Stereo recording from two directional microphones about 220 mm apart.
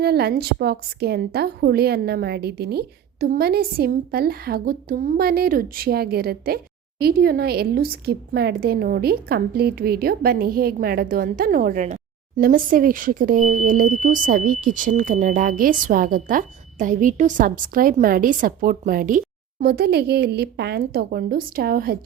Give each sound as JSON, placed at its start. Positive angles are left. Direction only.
{"t": 0.0, "sound": "a woman's voice", "side_deg": -45}